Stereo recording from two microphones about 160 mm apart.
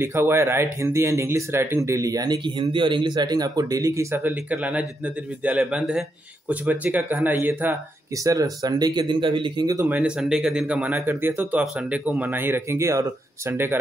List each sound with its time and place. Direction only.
0.0 s speech: 15° right (ahead or behind)
8.2 s speech: 20° right (ahead or behind)
9.8 s speech: 10° right (ahead or behind)